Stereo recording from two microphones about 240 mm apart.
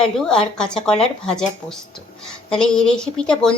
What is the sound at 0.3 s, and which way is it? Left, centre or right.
A woman's voice, centre.